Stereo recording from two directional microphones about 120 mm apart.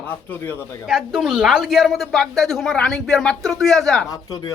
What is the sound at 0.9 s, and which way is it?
A woman's voice, 5° right (ahead or behind).